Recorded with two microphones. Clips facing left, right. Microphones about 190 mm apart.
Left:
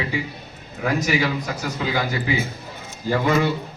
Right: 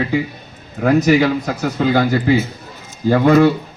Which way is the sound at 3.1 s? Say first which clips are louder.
Right 9 dB; 55° right (ahead or behind).